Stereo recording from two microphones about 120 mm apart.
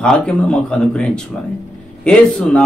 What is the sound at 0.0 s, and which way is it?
Speech, 5° left (ahead or behind).